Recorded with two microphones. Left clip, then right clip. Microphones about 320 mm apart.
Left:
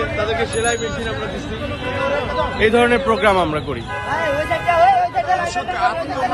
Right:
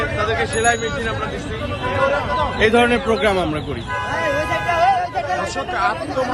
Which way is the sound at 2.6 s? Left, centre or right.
Centre.